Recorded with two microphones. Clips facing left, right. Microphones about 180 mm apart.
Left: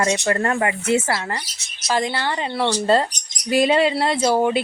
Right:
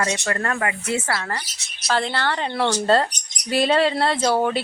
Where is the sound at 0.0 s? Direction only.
30° left (ahead or behind).